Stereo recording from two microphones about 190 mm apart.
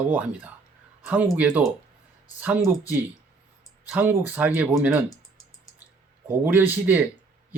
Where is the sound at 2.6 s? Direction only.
20° left (ahead or behind).